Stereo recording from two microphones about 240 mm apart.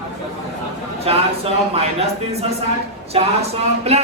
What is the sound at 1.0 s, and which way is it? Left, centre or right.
A woman's voice, right.